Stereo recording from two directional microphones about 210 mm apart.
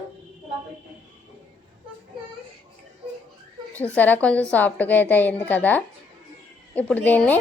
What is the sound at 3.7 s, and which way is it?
A woman's voice, 5° left (ahead or behind).